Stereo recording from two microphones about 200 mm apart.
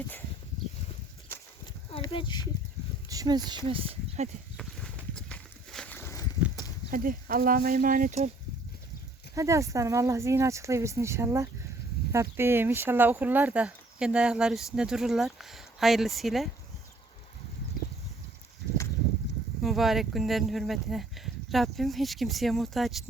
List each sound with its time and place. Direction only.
1.9 s a sound: 25° left (ahead or behind)
3.1 s speech: 20° right (ahead or behind)
4.5 s a sound: 5° left (ahead or behind)
6.9 s speech: 45° right (ahead or behind)
9.3 s speech: 15° right (ahead or behind); by 16.5 s centre (ahead or behind)
19.6 s speech: centre (ahead or behind)